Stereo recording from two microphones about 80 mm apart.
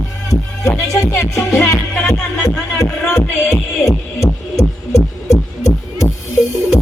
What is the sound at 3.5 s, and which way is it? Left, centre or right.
Music, left.